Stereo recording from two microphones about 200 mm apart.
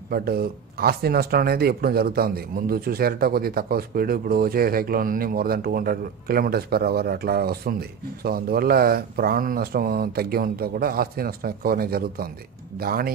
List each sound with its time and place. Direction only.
0.1 s speech: 50° right (ahead or behind)